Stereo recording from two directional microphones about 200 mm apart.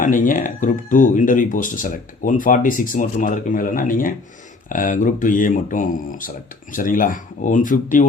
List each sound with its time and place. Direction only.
0.0 s speech: 40° left (ahead or behind)